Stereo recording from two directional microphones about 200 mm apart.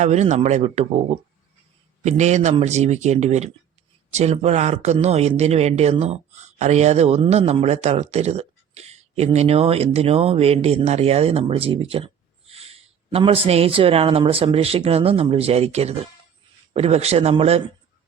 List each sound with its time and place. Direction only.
0.0 s speech: 35° right (ahead or behind)